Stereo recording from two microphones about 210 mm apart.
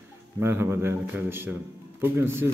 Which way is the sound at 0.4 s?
10° right (ahead or behind).